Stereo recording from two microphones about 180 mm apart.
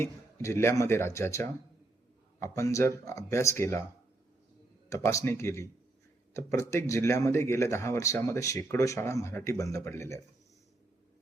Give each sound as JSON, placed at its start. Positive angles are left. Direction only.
{"t": 0.0, "sound": "speech", "side_deg": 15}
{"t": 4.9, "sound": "speech", "side_deg": 15}